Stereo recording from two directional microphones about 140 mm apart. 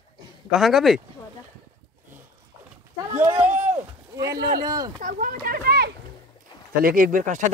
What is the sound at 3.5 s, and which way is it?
Rowboat, 15° right (ahead or behind).